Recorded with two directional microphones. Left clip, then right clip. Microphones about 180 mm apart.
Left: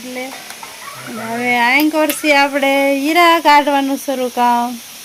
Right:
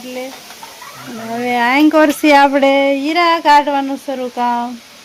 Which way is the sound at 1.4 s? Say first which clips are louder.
Left 1 dB; 15° right (ahead or behind).